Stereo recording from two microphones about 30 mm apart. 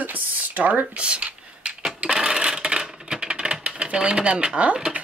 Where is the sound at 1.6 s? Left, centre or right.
Right.